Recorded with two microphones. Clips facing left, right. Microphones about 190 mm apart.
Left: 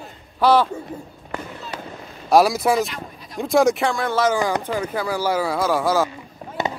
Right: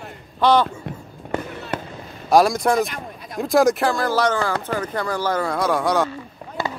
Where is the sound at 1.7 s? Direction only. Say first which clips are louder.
Right 6 dB; 55° right (ahead or behind).